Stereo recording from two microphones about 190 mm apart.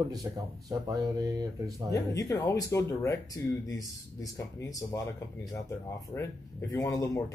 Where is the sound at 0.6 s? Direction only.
20° right (ahead or behind).